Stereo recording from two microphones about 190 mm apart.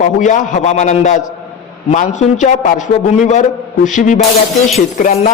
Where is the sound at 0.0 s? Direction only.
40° left (ahead or behind).